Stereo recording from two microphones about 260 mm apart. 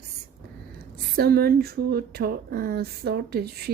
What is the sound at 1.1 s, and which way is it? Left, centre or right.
Speech, right.